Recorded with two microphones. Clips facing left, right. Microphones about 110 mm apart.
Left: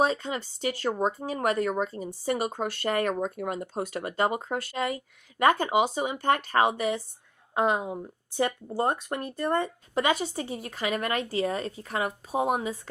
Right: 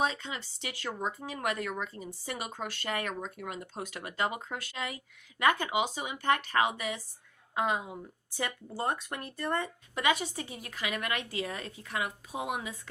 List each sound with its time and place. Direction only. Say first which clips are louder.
0.0 s speech: left 6 dB; 40° left (ahead or behind)
9.4 s speech: left 6 dB; 20° left (ahead or behind)
9.6 s speech: left 4 dB; 35° left (ahead or behind)